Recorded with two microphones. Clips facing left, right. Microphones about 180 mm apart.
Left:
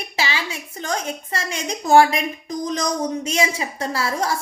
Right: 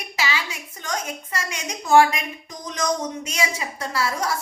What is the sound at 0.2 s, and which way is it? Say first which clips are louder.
A woman's voice: left 1 dB; 30° left (ahead or behind).